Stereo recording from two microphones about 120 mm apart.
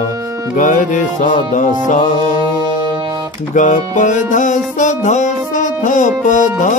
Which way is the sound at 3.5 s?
90° left.